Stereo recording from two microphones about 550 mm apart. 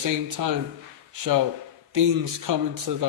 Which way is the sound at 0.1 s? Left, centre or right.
Right.